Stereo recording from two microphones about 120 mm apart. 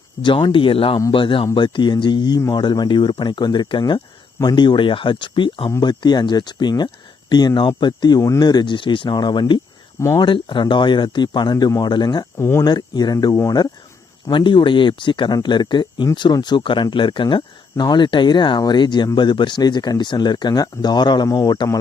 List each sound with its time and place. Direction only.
0.2 s speech: 40° left (ahead or behind)
12.4 s speech: 25° left (ahead or behind)
12.6 s speech: 35° left (ahead or behind)
14.3 s speech: 40° left (ahead or behind)